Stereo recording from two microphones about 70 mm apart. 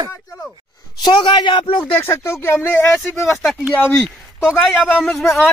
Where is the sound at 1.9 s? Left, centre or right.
Left.